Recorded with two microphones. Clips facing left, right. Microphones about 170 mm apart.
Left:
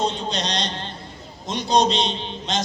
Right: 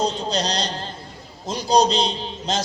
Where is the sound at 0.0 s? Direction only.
35° right (ahead or behind).